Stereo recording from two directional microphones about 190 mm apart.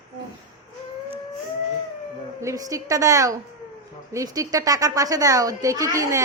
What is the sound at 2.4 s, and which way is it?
A woman's voice, 15° right (ahead or behind).